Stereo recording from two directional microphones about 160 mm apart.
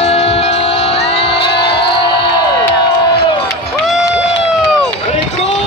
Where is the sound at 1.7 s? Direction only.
30° left (ahead or behind).